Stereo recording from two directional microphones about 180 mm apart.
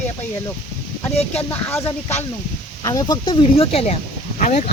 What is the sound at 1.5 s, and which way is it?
Speech, 10° left (ahead or behind).